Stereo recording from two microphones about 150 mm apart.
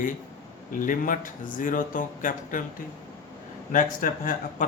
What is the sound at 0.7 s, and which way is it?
Speech, 65° left (ahead or behind).